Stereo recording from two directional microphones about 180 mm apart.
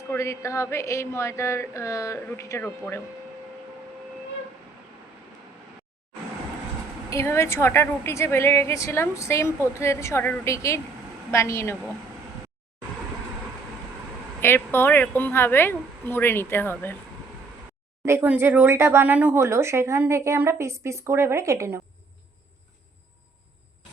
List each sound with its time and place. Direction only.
0.1 s a woman's voice: 15° left (ahead or behind)
7.1 s a woman's voice: 15° left (ahead or behind)
14.4 s a woman's voice: 10° left (ahead or behind)
18.0 s speech: 15° right (ahead or behind)